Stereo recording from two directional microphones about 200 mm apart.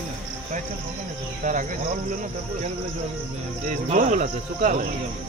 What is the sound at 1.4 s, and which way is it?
Speech, 40° right (ahead or behind).